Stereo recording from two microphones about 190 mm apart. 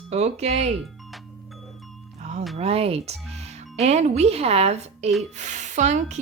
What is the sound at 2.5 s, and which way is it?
A woman's voice, 35° right (ahead or behind).